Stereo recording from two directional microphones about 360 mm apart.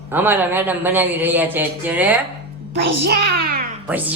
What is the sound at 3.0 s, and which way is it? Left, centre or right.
Speech, right.